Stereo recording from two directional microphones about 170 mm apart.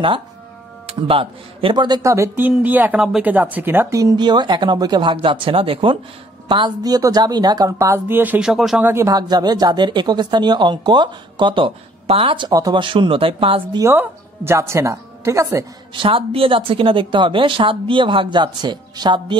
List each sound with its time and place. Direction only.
0.8 s speech: 30° right (ahead or behind)
2.0 s speech: 15° right (ahead or behind); by 13.6 s 30° right (ahead or behind)
13.7 s speech: 15° right (ahead or behind)
15.9 s speech: 30° right (ahead or behind)